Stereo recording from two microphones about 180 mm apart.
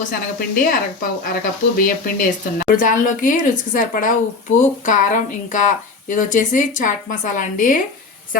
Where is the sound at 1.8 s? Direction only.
50° left (ahead or behind).